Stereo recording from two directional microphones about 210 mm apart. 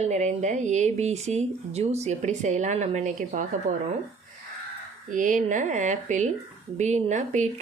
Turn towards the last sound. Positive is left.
turn(degrees=-35)  # may be behind; listen again after turning